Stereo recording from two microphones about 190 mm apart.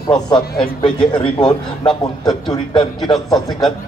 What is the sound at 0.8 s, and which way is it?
A man's voice, 25° left (ahead or behind).